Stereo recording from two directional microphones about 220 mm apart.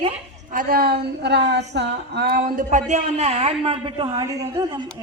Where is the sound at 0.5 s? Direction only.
45° right (ahead or behind).